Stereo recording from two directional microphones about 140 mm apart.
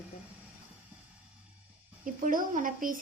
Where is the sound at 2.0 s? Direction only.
75° right (ahead or behind).